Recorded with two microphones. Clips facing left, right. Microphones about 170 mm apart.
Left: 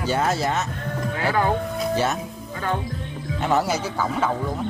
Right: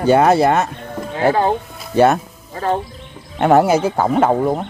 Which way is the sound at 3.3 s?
55° right (ahead or behind).